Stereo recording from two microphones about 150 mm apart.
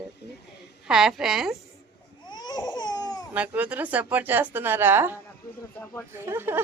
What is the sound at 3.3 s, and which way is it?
Speech, 10° right (ahead or behind).